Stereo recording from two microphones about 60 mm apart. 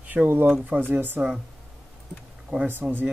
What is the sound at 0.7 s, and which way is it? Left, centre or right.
Speech, right.